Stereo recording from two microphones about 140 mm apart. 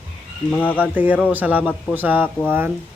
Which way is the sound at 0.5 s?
10° left (ahead or behind).